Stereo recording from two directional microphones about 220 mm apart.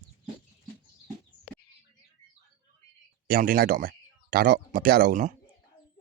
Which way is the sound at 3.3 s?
40° right (ahead or behind).